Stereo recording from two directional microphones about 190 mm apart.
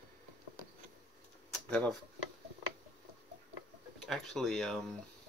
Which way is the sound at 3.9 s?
Centre (ahead or behind).